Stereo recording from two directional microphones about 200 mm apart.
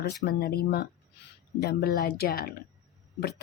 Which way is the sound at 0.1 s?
50° left (ahead or behind).